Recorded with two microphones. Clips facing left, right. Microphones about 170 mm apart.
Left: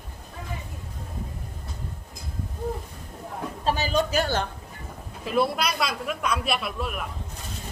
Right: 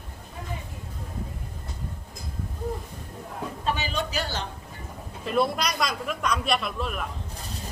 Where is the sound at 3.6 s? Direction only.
40° left (ahead or behind).